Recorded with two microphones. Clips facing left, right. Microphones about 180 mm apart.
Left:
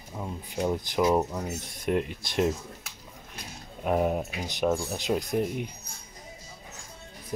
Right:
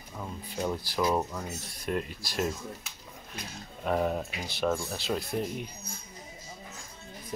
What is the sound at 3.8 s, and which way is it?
Speech, 15° left (ahead or behind).